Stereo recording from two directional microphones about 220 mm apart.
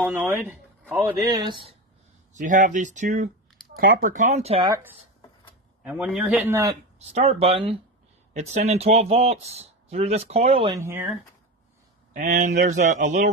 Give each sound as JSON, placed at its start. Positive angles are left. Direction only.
{"t": 0.0, "sound": "speech", "side_deg": -10}
{"t": 1.3, "sound": "speech", "side_deg": -20}
{"t": 2.3, "sound": "speech", "side_deg": -35}
{"t": 5.9, "sound": "a man's voice", "side_deg": -5}
{"t": 7.1, "sound": "speech", "side_deg": -30}
{"t": 10.7, "sound": "a man's voice", "side_deg": -10}
{"t": 12.1, "sound": "speech", "side_deg": -35}